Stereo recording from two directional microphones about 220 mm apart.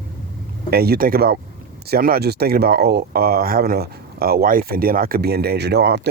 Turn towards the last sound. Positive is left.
turn(degrees=-50)  # may be behind; listen again after turning